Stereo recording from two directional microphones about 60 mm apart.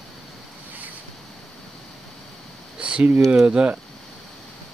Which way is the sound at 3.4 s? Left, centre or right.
Centre.